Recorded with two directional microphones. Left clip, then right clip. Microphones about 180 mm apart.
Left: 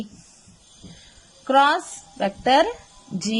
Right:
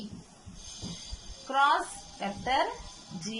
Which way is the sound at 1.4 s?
60° left (ahead or behind).